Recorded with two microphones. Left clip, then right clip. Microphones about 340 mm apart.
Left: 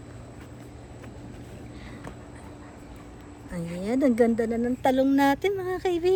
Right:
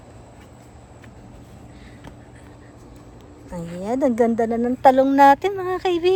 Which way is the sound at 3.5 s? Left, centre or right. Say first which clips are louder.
Right 4 dB; centre.